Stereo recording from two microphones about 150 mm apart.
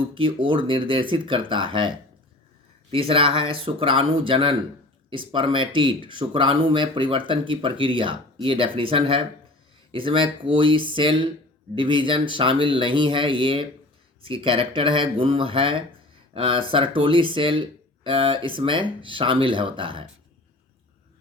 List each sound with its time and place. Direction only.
0.1 s speech: 35° right (ahead or behind)